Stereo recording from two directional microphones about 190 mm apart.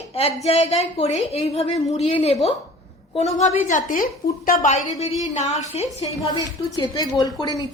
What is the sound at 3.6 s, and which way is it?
A woman's voice, 45° left (ahead or behind).